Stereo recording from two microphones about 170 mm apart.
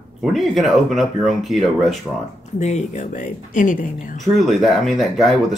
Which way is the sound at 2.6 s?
45° left (ahead or behind).